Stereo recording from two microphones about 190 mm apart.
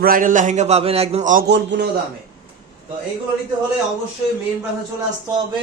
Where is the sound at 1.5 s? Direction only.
65° right (ahead or behind).